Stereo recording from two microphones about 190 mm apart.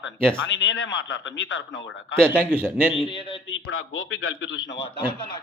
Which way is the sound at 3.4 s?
85° left.